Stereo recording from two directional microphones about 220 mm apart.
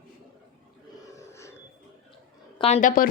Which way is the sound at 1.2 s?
15° left (ahead or behind).